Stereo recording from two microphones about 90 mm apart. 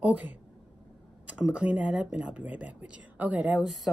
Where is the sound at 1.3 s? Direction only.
10° right (ahead or behind).